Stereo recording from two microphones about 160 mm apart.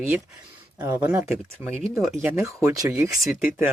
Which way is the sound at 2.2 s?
15° right (ahead or behind).